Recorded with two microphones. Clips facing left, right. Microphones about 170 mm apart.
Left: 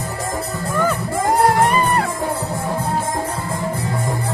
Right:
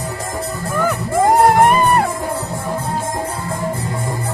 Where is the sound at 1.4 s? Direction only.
50° right (ahead or behind).